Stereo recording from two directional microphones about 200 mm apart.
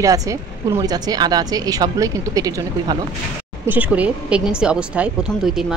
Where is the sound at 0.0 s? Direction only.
15° right (ahead or behind).